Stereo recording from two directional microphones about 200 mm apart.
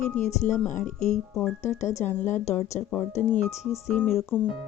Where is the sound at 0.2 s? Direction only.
40° left (ahead or behind).